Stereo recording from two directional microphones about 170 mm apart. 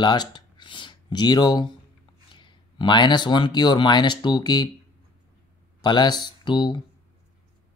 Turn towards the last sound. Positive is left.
turn(degrees=25)  # may be behind; listen again after turning